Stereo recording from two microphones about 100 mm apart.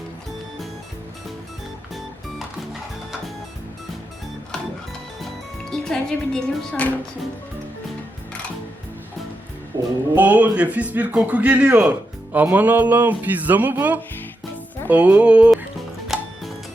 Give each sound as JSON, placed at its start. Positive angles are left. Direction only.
{"t": 5.7, "sound": "speech", "side_deg": 5}
{"t": 10.2, "sound": "a man's voice", "side_deg": -15}
{"t": 16.0, "sound": "music", "side_deg": -5}